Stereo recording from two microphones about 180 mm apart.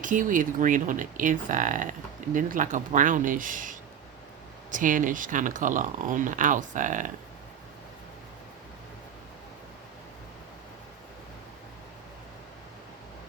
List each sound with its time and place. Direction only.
0.0 s speech: 45° right (ahead or behind)